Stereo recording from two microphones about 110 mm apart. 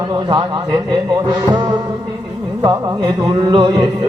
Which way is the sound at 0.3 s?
45° right (ahead or behind).